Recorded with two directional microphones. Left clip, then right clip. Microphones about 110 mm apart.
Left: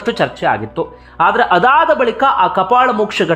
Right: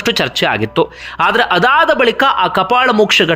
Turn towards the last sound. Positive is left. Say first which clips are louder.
# right 4 dB
turn(degrees=-25)  # may be behind; listen again after turning